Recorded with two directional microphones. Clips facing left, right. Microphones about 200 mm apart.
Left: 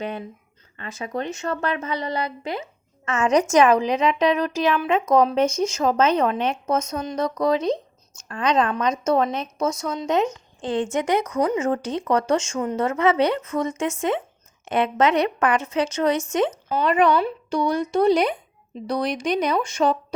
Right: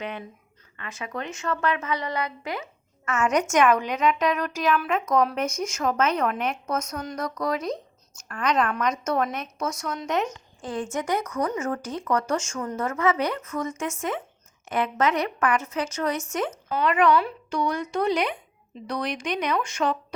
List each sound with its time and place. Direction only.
0.0 s a woman's voice: 35° left (ahead or behind)
16.1 s speech: 90° left
16.7 s speech: 35° left (ahead or behind)